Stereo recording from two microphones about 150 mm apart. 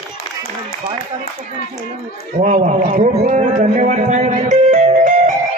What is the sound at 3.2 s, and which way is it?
A man's voice, 45° right (ahead or behind).